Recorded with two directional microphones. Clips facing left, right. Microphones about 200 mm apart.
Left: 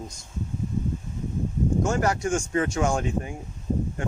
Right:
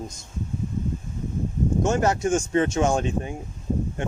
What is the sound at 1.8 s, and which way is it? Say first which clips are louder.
Speech: right 6 dB; 20° right (ahead or behind).